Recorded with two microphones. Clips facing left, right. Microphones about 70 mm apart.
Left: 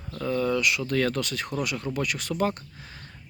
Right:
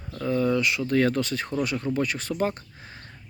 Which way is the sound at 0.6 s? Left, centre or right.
Right.